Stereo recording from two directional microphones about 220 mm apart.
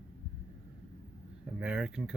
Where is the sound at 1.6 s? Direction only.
5° right (ahead or behind).